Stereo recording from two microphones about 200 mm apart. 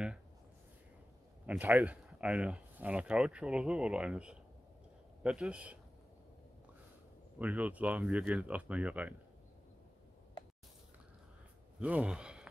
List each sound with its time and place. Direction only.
1.4 s speech: 5° right (ahead or behind)
7.3 s speech: 5° right (ahead or behind)
11.8 s speech: 5° right (ahead or behind)